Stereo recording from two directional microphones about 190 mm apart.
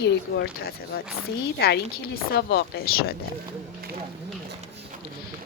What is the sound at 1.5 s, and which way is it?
Speech, 55° left (ahead or behind).